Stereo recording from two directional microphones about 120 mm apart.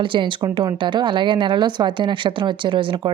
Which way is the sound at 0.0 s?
45° right (ahead or behind).